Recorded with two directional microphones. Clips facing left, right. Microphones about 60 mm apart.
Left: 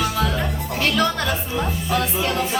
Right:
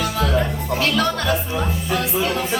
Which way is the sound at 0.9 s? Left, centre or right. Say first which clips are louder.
Right 1 dB; centre.